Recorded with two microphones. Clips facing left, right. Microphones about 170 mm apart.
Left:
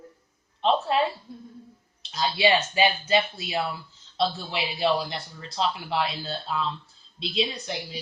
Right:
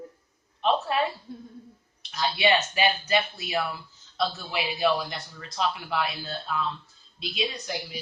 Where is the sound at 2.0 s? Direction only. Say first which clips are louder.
Left 2 dB; 25° left (ahead or behind).